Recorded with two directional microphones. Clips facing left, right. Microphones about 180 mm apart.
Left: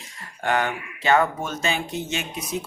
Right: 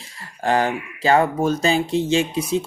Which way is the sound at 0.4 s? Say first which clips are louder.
Right 4 dB; 35° right (ahead or behind).